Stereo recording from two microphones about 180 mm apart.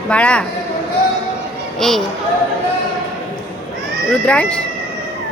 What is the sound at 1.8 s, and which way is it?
Speech, centre (ahead or behind).